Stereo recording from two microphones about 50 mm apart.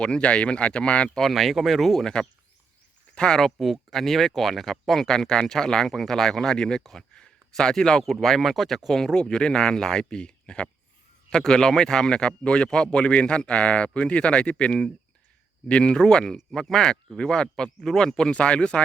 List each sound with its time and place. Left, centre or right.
0.0 s speech: left
1.2 s speech: centre
3.2 s speech: centre
3.4 s speech: centre; by 18.8 s left